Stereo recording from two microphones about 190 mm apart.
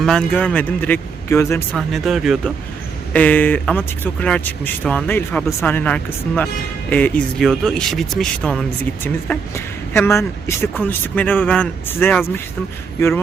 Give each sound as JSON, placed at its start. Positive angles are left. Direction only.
{"t": 0.0, "sound": "a man's voice", "side_deg": 5}
{"t": 1.7, "sound": "a man's voice", "side_deg": 0}